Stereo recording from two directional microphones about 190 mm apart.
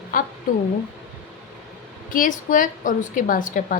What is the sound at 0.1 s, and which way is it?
Speech, 45° left (ahead or behind).